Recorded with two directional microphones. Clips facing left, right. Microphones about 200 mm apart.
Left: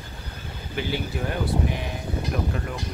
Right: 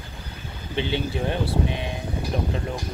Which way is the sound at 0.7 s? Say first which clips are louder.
Right 3 dB; 25° right (ahead or behind).